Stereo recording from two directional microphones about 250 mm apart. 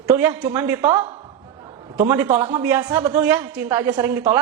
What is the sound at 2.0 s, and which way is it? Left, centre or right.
Speech, centre.